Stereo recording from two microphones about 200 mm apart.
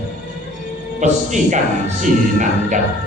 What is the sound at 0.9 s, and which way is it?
A man's voice, 40° right (ahead or behind).